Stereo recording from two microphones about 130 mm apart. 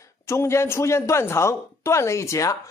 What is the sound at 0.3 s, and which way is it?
A woman's voice, 20° left (ahead or behind).